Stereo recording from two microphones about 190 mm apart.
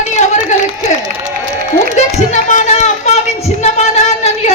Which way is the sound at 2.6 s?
35° left (ahead or behind).